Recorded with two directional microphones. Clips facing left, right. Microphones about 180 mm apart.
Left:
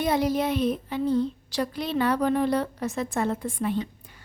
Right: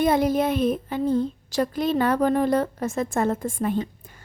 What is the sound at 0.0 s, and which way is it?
A woman's voice, 50° right (ahead or behind).